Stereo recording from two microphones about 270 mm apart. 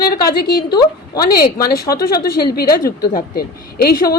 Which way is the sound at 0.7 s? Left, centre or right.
Centre.